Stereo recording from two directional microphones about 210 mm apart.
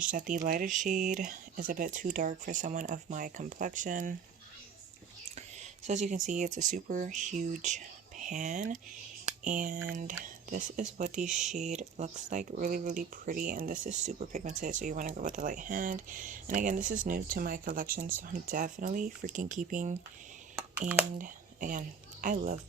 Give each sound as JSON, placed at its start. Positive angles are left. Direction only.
{"t": 0.1, "sound": "speech", "side_deg": -40}
{"t": 5.3, "sound": "a sound", "side_deg": -35}
{"t": 6.2, "sound": "speech", "side_deg": -35}
{"t": 11.3, "sound": "speech", "side_deg": 0}
{"t": 11.5, "sound": "speech", "side_deg": -35}
{"t": 21.2, "sound": "a woman's voice", "side_deg": -40}